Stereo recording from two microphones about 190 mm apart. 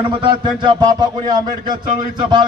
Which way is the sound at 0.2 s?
25° right (ahead or behind).